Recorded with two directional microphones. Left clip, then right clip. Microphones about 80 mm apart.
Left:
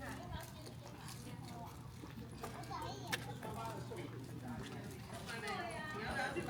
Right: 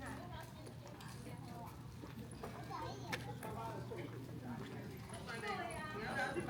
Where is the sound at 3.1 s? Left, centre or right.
Left.